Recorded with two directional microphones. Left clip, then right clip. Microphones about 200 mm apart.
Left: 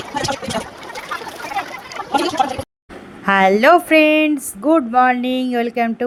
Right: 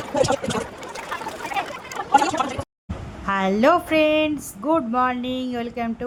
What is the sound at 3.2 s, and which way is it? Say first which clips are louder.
Speech: left 7 dB; 25° left (ahead or behind).